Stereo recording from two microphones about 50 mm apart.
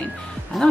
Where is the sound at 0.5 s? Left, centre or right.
Centre.